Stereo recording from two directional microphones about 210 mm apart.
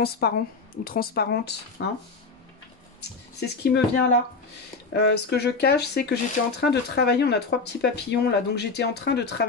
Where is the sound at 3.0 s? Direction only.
50° left (ahead or behind).